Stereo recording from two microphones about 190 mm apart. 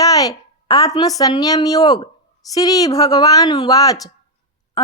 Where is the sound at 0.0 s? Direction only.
20° left (ahead or behind).